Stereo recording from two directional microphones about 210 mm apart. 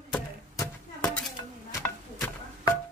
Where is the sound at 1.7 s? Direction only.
10° left (ahead or behind).